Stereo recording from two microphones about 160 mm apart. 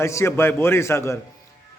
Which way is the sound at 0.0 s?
15° left (ahead or behind).